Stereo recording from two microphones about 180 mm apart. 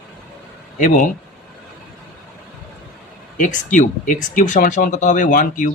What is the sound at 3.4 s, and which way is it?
Speech, 45° left (ahead or behind).